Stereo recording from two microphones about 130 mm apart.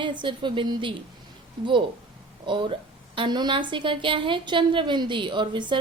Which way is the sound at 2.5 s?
40° right (ahead or behind).